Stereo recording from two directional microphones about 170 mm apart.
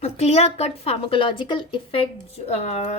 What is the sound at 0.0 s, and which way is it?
A woman's voice, 40° left (ahead or behind).